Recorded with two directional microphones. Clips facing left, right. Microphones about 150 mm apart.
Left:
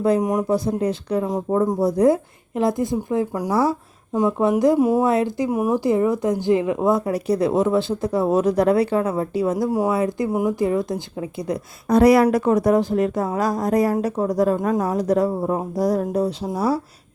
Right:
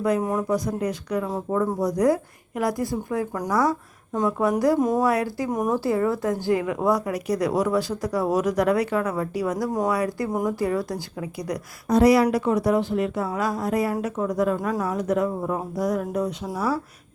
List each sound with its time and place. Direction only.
0.2 s a woman's voice: 15° left (ahead or behind)
0.4 s speech: 30° left (ahead or behind)
4.8 s a woman's voice: 10° left (ahead or behind)
5.0 s speech: 25° left (ahead or behind)
5.5 s a woman's voice: 5° left (ahead or behind)
5.8 s speech: 20° left (ahead or behind)
11.9 s speech: 55° left (ahead or behind); by 16.8 s 35° left (ahead or behind)